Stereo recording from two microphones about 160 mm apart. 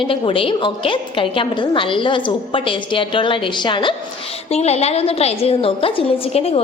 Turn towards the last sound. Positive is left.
turn(degrees=40)  # may be behind; listen again after turning